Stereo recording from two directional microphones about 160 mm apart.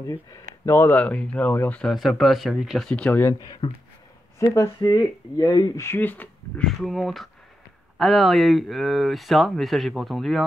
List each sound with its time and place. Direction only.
0.7 s speech: 15° left (ahead or behind)
3.6 s speech: 30° left (ahead or behind)
4.4 s speech: 20° left (ahead or behind); by 10.4 s centre (ahead or behind)